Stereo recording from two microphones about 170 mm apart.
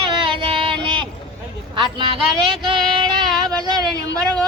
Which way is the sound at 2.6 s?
30° right (ahead or behind).